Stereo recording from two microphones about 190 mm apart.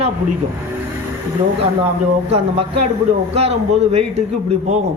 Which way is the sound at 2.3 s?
30° right (ahead or behind).